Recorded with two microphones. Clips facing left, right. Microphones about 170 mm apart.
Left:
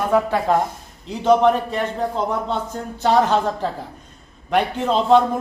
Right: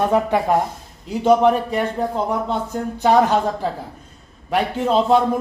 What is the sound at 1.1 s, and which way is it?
A man's voice, 10° right (ahead or behind).